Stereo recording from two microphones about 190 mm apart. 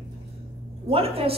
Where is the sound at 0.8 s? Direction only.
30° right (ahead or behind).